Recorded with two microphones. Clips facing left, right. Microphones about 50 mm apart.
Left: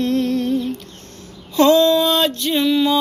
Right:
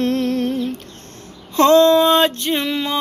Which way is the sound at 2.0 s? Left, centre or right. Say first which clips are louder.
Right 3 dB; right.